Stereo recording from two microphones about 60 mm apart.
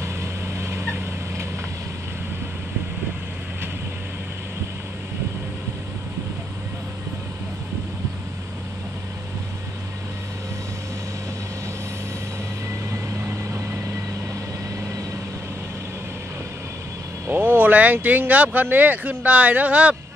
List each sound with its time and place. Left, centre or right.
0.0 s vehicle: right
17.3 s speech: right